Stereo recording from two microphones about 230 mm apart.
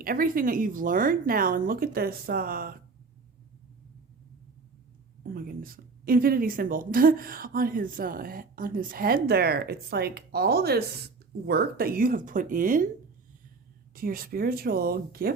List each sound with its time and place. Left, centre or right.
0.0 s a woman's voice: right
5.2 s a woman's voice: right
13.9 s a woman's voice: right